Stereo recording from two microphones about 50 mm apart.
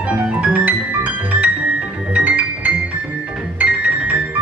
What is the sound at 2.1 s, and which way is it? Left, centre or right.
Music, right.